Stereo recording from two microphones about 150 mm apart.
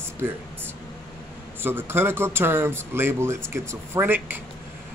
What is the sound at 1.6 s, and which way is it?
Speech, 15° right (ahead or behind).